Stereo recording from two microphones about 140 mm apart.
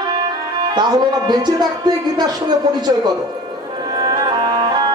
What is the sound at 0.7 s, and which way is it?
Speech, 30° right (ahead or behind).